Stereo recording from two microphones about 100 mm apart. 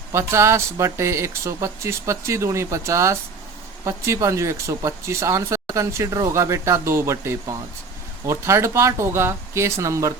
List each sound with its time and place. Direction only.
0.1 s speech: 30° right (ahead or behind)